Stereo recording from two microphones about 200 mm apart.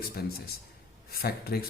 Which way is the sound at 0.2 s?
50° left (ahead or behind).